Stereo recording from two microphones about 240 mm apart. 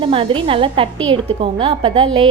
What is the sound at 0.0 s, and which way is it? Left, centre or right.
A woman's voice, right.